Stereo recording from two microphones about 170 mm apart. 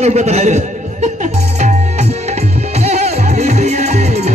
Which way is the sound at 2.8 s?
40° right (ahead or behind).